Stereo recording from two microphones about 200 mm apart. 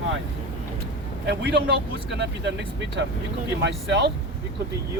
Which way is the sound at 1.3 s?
55° right (ahead or behind).